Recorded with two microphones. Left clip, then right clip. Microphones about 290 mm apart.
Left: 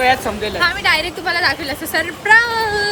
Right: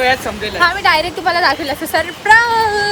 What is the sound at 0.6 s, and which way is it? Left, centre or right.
A woman's voice, centre.